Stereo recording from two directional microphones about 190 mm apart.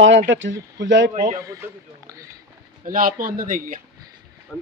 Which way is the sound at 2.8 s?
45° right (ahead or behind).